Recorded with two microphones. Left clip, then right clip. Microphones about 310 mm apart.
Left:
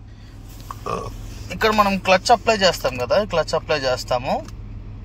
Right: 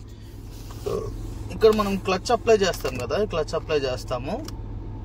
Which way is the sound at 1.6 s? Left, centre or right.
Centre.